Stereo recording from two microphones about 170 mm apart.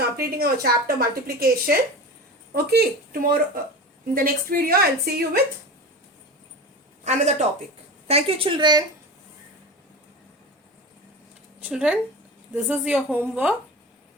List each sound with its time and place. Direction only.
0.2 s speech: 65° right (ahead or behind)
7.0 s a man's voice: 40° right (ahead or behind); by 8.8 s 25° right (ahead or behind)
11.6 s a woman's voice: 5° right (ahead or behind)